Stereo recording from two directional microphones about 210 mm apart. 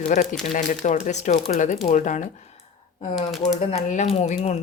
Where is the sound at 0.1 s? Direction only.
40° left (ahead or behind).